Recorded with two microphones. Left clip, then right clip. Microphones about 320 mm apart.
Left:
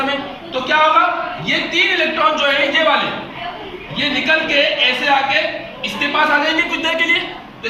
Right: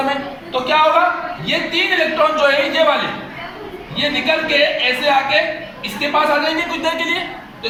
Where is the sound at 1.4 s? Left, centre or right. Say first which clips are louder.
Left 2 dB; centre.